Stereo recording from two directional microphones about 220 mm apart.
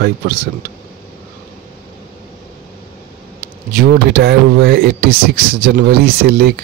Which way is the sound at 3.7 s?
45° right (ahead or behind).